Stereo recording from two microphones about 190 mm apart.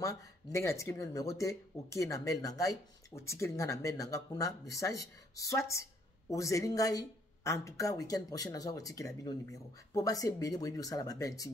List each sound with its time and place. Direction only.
0.0 s speech: 15° left (ahead or behind)